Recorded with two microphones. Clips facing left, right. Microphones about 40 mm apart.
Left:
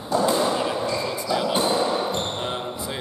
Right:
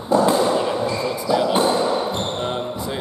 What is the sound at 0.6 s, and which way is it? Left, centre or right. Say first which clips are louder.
Speech: right 3 dB; centre.